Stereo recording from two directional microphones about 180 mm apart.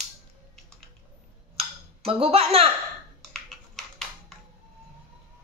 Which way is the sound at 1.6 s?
35° right (ahead or behind).